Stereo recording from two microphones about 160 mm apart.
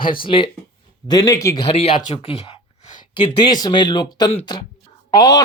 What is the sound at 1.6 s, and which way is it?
Speech, 35° left (ahead or behind).